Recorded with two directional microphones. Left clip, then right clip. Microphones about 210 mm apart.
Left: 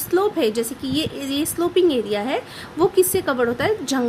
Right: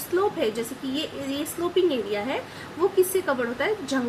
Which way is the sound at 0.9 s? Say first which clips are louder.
Left 6 dB; 50° left (ahead or behind).